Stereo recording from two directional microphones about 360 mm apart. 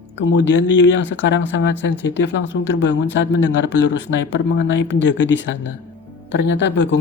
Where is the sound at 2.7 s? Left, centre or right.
Left.